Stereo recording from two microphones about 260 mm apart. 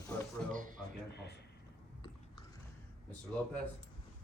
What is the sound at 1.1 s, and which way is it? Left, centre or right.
Speech, left.